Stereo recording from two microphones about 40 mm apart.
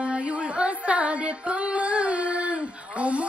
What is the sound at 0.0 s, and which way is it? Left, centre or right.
Music, right.